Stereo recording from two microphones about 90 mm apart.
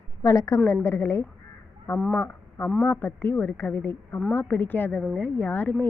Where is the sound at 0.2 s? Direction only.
40° left (ahead or behind).